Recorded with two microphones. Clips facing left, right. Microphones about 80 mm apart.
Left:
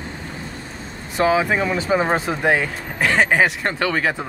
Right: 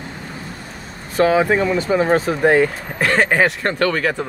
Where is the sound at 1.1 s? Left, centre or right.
Centre.